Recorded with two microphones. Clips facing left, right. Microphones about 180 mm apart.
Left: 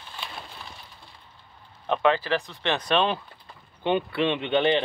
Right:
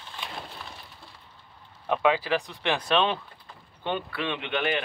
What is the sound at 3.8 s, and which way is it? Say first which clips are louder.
A man's voice: left 7 dB; 20° left (ahead or behind).